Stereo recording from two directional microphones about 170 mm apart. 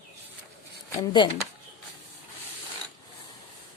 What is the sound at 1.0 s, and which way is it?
Speech, 25° left (ahead or behind).